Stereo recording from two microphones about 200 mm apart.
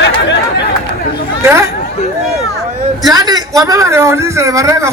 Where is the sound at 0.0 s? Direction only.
60° left (ahead or behind).